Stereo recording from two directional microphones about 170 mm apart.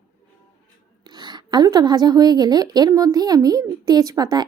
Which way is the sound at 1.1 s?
25° right (ahead or behind).